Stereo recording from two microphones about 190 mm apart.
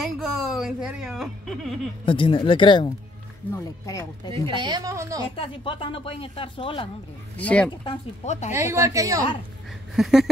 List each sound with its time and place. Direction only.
0.0 s a sound: centre (ahead or behind)
2.0 s speech: 25° left (ahead or behind)
4.3 s a woman's voice: 25° right (ahead or behind)
5.3 s speech: 30° left (ahead or behind)
7.3 s speech: 5° left (ahead or behind)
7.8 s speech: 30° left (ahead or behind)
8.5 s a woman's voice: 15° right (ahead or behind)
9.9 s a sound: centre (ahead or behind)